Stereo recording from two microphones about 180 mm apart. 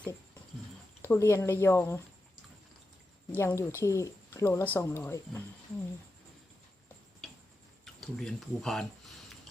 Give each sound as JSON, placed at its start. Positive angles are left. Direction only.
{"t": 1.0, "sound": "speech", "side_deg": 15}
{"t": 3.3, "sound": "speech", "side_deg": 15}
{"t": 7.2, "sound": "tick-tock", "side_deg": 0}
{"t": 8.0, "sound": "speech", "side_deg": 5}